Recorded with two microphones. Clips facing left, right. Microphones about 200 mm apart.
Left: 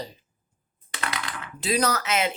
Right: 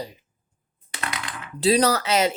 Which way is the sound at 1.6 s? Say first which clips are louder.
Right 6 dB; 35° right (ahead or behind).